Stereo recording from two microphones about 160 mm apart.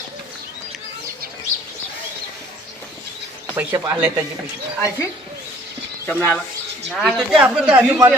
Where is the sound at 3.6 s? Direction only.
20° right (ahead or behind).